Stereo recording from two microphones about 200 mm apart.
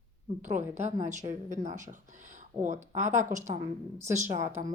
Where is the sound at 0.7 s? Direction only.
35° right (ahead or behind).